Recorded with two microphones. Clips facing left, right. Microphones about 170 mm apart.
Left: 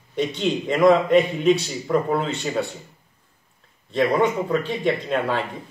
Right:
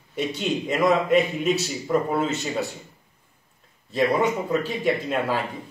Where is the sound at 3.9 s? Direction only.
5° right (ahead or behind).